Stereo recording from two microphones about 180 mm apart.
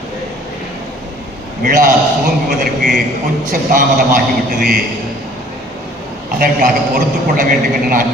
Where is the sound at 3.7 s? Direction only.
50° right (ahead or behind).